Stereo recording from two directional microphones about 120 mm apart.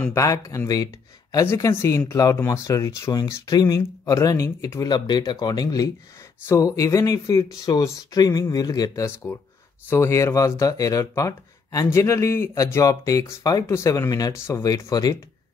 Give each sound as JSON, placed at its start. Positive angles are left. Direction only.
{"t": 0.1, "sound": "speech", "side_deg": 25}